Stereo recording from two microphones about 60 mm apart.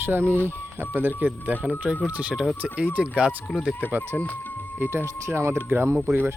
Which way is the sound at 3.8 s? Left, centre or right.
Left.